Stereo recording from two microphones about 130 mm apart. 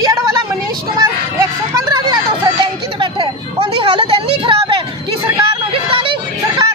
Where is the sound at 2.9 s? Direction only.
40° right (ahead or behind).